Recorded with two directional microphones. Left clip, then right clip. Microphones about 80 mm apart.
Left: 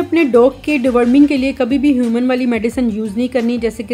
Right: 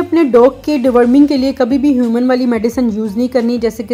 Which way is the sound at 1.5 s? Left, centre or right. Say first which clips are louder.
Right 3 dB; left.